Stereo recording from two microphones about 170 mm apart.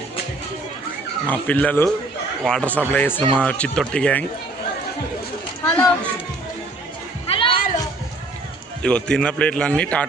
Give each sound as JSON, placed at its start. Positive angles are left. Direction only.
{"t": 1.3, "sound": "speech", "side_deg": 10}
{"t": 5.6, "sound": "speech", "side_deg": 10}
{"t": 7.3, "sound": "music", "side_deg": 30}
{"t": 8.8, "sound": "a man's voice", "side_deg": 5}